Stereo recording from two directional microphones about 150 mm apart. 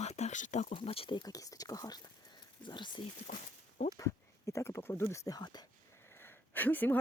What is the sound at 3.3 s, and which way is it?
Speech, 55° left (ahead or behind).